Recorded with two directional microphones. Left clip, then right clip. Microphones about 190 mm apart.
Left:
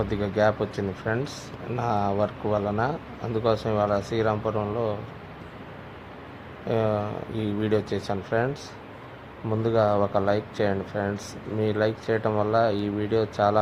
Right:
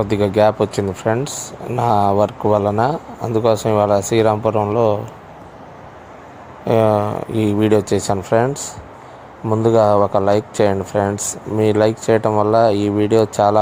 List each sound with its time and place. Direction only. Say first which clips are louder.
0.0 s speech: right 9 dB; 25° right (ahead or behind)
6.7 s speech: right 11 dB; 20° right (ahead or behind)
9.5 s speech: right 10 dB; 25° right (ahead or behind)